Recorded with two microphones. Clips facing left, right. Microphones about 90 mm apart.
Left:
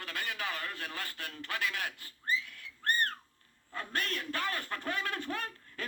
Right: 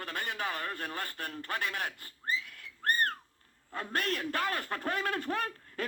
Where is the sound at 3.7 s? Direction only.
45° right (ahead or behind).